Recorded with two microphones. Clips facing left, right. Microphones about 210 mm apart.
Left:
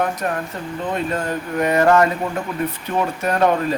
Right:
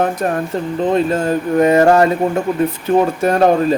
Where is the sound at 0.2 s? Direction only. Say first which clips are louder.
Right 6 dB; 30° right (ahead or behind).